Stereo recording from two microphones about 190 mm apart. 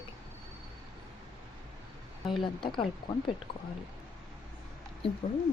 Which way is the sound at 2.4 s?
25° left (ahead or behind).